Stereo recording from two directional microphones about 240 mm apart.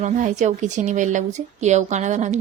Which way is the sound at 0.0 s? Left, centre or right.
Right.